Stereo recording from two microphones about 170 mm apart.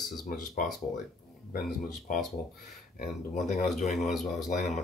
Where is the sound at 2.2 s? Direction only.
Centre (ahead or behind).